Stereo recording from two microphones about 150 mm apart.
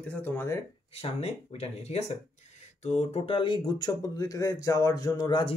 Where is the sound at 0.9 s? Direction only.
40° left (ahead or behind).